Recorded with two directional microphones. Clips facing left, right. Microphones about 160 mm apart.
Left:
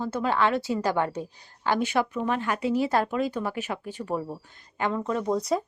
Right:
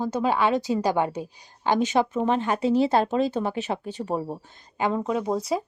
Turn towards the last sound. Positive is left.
turn(degrees=-15)  # may be behind; listen again after turning